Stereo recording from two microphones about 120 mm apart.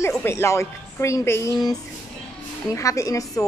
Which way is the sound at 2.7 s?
25° left (ahead or behind).